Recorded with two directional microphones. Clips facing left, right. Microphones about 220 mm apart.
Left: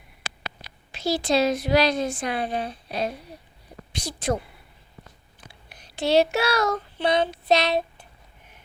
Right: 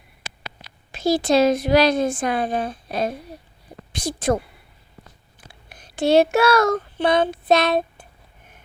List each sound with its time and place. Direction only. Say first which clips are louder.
0.9 s speech: right 5 dB; 50° right (ahead or behind)
5.5 s child singing: right 4 dB; 50° right (ahead or behind)